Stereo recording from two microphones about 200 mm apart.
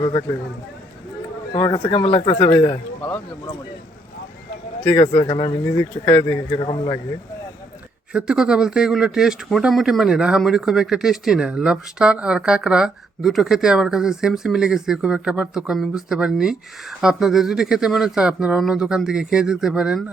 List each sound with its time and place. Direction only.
0.0 s speech: 20° left (ahead or behind)
1.5 s speech: 20° left (ahead or behind)
4.8 s speech: 20° left (ahead or behind)
8.1 s speech: 5° right (ahead or behind)